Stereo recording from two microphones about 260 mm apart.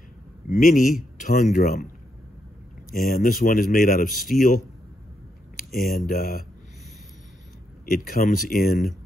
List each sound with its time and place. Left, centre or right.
0.5 s a man's voice: left
2.9 s a man's voice: left
5.8 s a man's voice: left
7.8 s a man's voice: left